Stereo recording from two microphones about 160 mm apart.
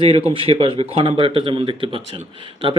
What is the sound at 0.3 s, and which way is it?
Speech, 35° right (ahead or behind).